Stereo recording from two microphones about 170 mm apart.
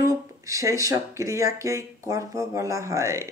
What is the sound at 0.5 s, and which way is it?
Speech, 20° right (ahead or behind).